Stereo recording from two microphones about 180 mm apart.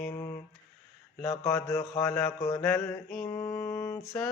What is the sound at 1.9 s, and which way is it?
Mantra, 15° left (ahead or behind).